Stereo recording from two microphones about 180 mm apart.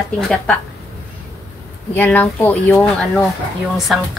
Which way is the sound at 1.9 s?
10° left (ahead or behind).